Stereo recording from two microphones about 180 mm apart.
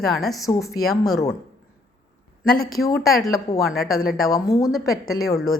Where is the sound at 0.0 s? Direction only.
Centre (ahead or behind).